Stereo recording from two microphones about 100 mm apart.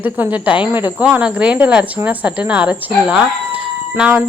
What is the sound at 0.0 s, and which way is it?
A woman's voice, 15° right (ahead or behind).